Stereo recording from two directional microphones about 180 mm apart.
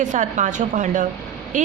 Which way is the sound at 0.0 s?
45° right (ahead or behind).